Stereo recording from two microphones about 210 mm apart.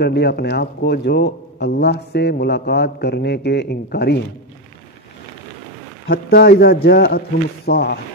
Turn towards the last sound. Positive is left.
turn(degrees=50)  # may be behind; listen again after turning